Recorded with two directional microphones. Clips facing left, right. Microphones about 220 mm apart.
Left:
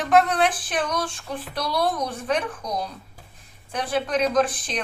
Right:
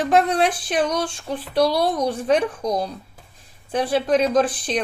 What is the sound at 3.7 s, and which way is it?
Speech, 30° right (ahead or behind).